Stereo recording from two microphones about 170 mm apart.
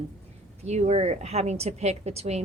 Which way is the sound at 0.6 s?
40° right (ahead or behind).